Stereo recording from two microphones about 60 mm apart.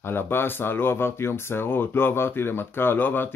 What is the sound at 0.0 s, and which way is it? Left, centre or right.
Speech, left.